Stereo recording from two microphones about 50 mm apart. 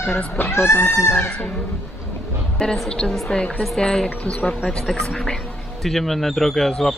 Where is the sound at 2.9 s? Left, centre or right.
Centre.